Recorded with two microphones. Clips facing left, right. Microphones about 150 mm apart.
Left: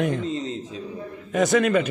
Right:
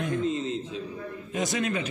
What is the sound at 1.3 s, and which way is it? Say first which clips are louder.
Speech: left 9 dB; 65° left (ahead or behind).